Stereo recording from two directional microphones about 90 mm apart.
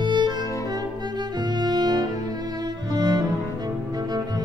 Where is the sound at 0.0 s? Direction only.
55° right (ahead or behind).